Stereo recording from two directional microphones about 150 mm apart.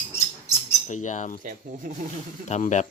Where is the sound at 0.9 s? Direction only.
55° left (ahead or behind).